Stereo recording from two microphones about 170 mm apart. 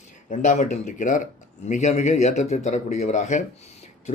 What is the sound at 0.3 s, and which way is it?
Speech, 50° left (ahead or behind).